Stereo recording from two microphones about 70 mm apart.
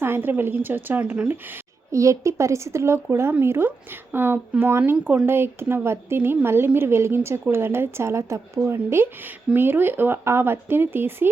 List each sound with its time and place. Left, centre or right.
0.0 s speech: right
1.9 s a woman's voice: right